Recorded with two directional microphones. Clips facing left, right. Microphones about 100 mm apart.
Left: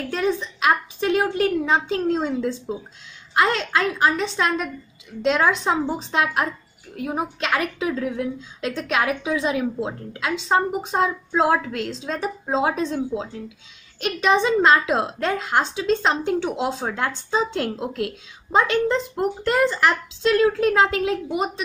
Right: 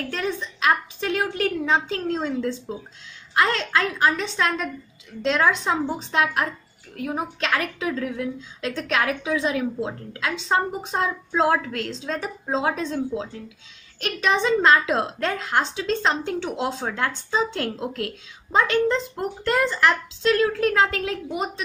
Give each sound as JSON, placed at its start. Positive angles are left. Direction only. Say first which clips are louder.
{"t": 0.1, "sound": "a woman's voice", "louder": "left 5 dB", "side_deg": 15}